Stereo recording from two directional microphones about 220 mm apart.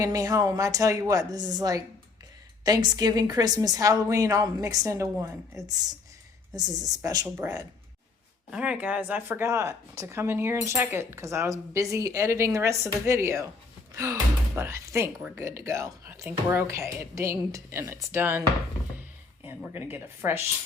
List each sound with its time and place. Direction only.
0.0 s speech: 15° right (ahead or behind)
19.7 s speech: 10° right (ahead or behind)